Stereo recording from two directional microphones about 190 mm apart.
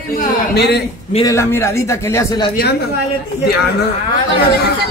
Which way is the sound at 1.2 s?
15° left (ahead or behind).